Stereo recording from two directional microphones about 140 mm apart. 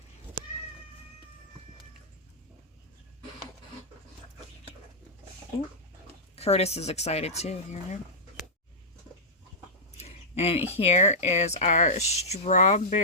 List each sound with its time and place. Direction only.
6.3 s speech: 50° left (ahead or behind)
10.0 s a sound: 50° left (ahead or behind)
10.7 s speech: 50° left (ahead or behind)